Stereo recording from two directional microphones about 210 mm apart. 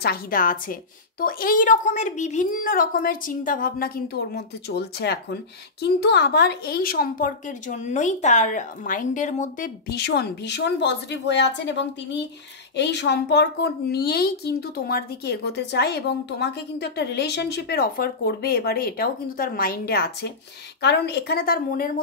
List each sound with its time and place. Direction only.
0.0 s a woman's voice: 45° left (ahead or behind)
9.8 s a woman's voice: 50° left (ahead or behind)